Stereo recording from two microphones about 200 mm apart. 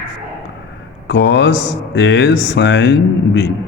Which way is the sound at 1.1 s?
60° left (ahead or behind).